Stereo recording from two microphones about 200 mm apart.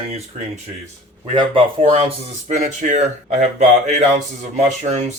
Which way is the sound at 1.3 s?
30° right (ahead or behind).